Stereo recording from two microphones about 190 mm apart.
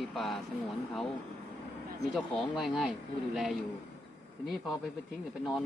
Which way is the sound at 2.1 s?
Centre (ahead or behind).